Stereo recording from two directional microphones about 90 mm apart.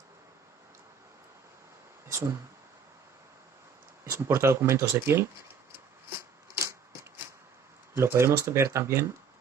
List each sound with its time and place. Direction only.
4.0 s speech: 30° right (ahead or behind)
7.9 s speech: 30° right (ahead or behind)